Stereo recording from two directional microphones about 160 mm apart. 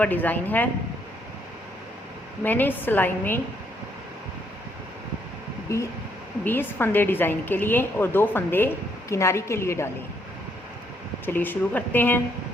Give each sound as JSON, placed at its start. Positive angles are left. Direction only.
{"t": 0.0, "sound": "a woman's voice", "side_deg": 10}
{"t": 2.4, "sound": "a woman's voice", "side_deg": 10}
{"t": 5.7, "sound": "a woman's voice", "side_deg": 20}
{"t": 11.3, "sound": "a woman's voice", "side_deg": 10}